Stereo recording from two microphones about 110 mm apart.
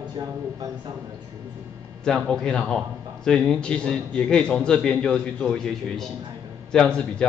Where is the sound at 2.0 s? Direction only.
5° left (ahead or behind).